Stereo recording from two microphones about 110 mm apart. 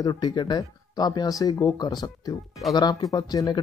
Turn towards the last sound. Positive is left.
turn(degrees=35)  # may be behind; listen again after turning